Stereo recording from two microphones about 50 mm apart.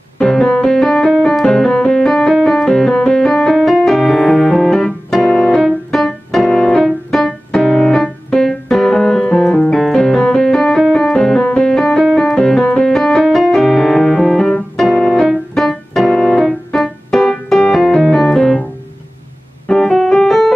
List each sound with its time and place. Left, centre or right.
0.2 s piano: centre
1.3 s music: centre
3.7 s piano: centre
7.1 s keyboard: centre
7.5 s music: centre
12.2 s piano: centre
14.8 s keyboard: centre
19.7 s keyboard: centre